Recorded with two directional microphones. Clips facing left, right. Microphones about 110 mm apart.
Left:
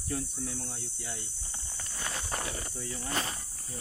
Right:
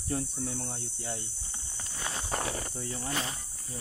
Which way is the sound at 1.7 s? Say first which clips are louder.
Right 1 dB; 20° right (ahead or behind).